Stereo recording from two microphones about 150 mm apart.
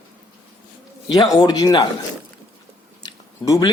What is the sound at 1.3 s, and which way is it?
Speech, 25° left (ahead or behind).